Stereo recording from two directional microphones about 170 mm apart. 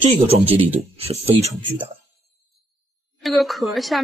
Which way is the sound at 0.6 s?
35° right (ahead or behind).